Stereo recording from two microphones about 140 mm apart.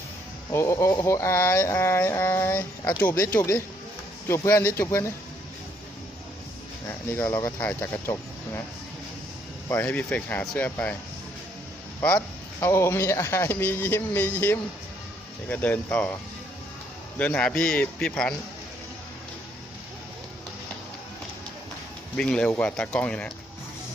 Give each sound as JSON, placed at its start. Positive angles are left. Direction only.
{"t": 0.5, "sound": "speech", "side_deg": 20}
{"t": 6.8, "sound": "speech", "side_deg": 15}
{"t": 9.6, "sound": "speech", "side_deg": 15}
{"t": 11.9, "sound": "speech", "side_deg": 20}
{"t": 17.2, "sound": "speech", "side_deg": 10}
{"t": 22.1, "sound": "speech", "side_deg": 5}